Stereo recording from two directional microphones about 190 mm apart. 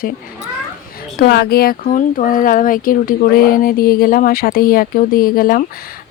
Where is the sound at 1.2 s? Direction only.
55° left (ahead or behind).